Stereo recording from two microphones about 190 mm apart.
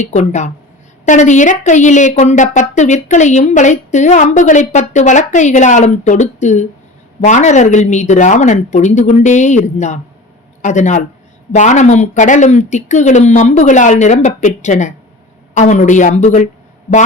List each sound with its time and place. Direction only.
0.0 s a woman's voice: 40° left (ahead or behind)